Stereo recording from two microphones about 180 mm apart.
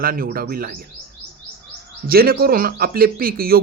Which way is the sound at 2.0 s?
55° right (ahead or behind).